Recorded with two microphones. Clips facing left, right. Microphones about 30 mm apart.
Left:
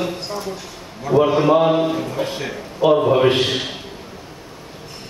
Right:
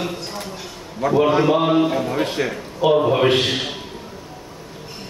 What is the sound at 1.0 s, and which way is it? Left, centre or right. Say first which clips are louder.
Speech: even; right.